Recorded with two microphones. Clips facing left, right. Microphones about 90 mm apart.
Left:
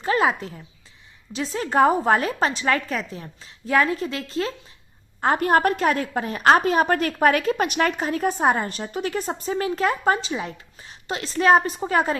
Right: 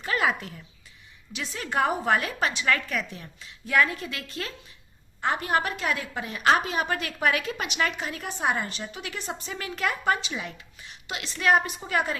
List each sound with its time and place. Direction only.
0.0 s a woman's voice: 30° left (ahead or behind)
5.2 s a woman's voice: 45° left (ahead or behind)